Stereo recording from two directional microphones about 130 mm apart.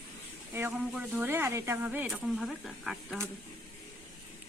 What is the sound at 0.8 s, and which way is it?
Speech, 10° right (ahead or behind).